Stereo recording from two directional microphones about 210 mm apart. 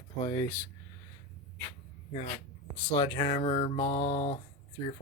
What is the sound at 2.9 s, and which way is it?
Speech, 20° left (ahead or behind).